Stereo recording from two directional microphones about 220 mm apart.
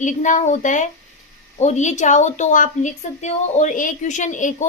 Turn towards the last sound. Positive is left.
turn(degrees=35)  # may be behind; listen again after turning